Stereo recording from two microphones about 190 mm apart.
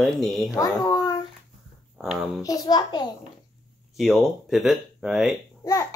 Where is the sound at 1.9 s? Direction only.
Centre (ahead or behind).